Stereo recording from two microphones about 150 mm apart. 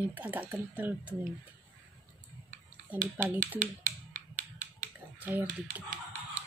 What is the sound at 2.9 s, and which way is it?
Speech, 10° right (ahead or behind).